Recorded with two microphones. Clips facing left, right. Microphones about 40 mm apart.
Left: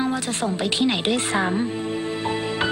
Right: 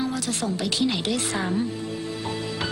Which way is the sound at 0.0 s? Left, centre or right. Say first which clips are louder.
Left 3 dB; left.